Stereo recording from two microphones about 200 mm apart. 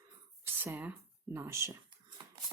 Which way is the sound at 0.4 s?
10° right (ahead or behind).